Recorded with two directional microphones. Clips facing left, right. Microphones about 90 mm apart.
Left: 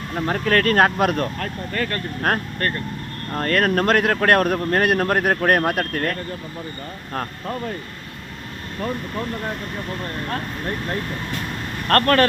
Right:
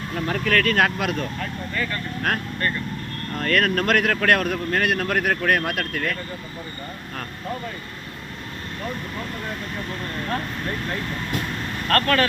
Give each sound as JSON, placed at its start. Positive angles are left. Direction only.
{"t": 0.2, "sound": "speech", "side_deg": 30}
{"t": 3.3, "sound": "speech", "side_deg": 35}
{"t": 4.4, "sound": "speech", "side_deg": 40}
{"t": 11.9, "sound": "speech", "side_deg": 45}